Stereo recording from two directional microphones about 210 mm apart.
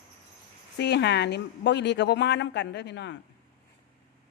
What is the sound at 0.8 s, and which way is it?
A woman's voice, 55° left (ahead or behind).